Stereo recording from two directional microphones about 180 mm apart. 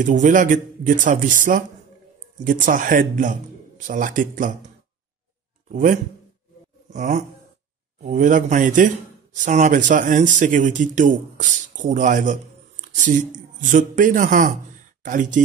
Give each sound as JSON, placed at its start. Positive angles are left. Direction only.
{"t": 0.0, "sound": "a man's voice", "side_deg": -45}
{"t": 5.7, "sound": "a man's voice", "side_deg": -45}
{"t": 6.9, "sound": "a sound", "side_deg": -45}
{"t": 8.0, "sound": "a man's voice", "side_deg": -45}